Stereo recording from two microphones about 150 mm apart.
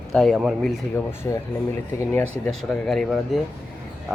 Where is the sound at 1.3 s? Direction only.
20° left (ahead or behind).